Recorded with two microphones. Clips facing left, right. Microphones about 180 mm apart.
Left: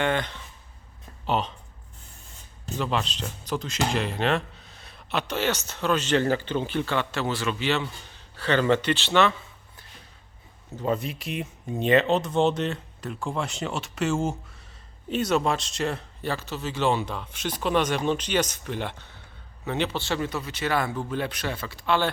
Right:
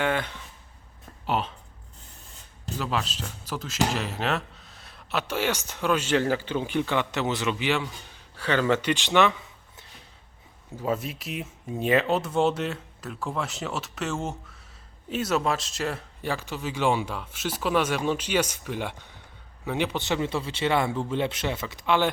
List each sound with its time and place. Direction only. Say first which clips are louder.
0.0 s speech: left 1 dB; 5° right (ahead or behind)
2.7 s speech: left 2 dB; 5° right (ahead or behind)
10.8 s speech: left 1 dB; 5° right (ahead or behind)